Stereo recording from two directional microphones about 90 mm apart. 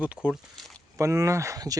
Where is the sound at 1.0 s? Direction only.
35° right (ahead or behind).